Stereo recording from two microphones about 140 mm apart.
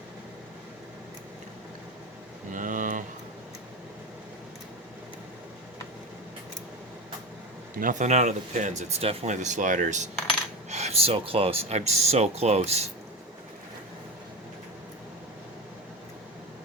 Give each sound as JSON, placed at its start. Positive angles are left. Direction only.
{"t": 2.5, "sound": "a sound", "side_deg": -70}
{"t": 7.8, "sound": "speech", "side_deg": -65}
{"t": 10.7, "sound": "speech", "side_deg": -50}